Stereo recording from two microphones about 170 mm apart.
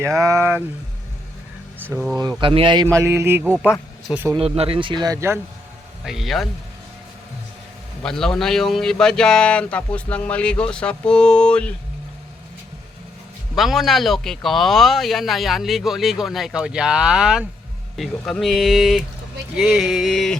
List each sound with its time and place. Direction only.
0.0 s mantra: 15° right (ahead or behind)
2.4 s speech: 30° right (ahead or behind)
2.8 s mantra: 15° right (ahead or behind)
4.4 s speech: 35° right (ahead or behind); by 5.4 s 15° right (ahead or behind)
6.1 s a man's voice: centre (ahead or behind)
8.0 s a man's voice: 5° left (ahead or behind)
13.6 s a man's voice: centre (ahead or behind)